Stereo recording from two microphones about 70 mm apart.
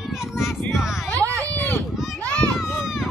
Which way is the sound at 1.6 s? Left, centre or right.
Left.